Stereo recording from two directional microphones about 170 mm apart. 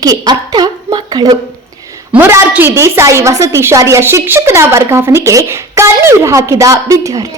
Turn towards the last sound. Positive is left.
turn(degrees=-20)  # may be behind; listen again after turning